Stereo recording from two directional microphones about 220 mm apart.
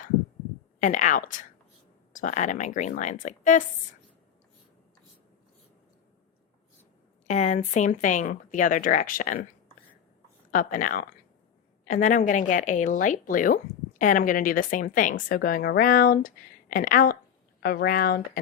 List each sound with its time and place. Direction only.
0.8 s a woman's voice: 35° left (ahead or behind)
7.3 s a woman's voice: 30° left (ahead or behind)
10.5 s a woman's voice: 35° left (ahead or behind)